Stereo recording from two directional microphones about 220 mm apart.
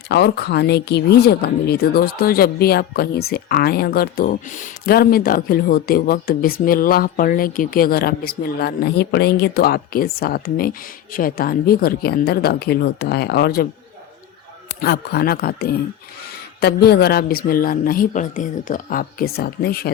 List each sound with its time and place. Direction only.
0.1 s speech: 50° left (ahead or behind)
14.8 s speech: 45° left (ahead or behind)